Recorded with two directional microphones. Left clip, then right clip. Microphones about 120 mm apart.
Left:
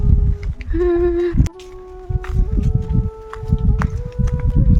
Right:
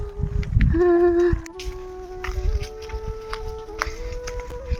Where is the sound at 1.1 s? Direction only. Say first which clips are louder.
Left 1 dB; 5° left (ahead or behind).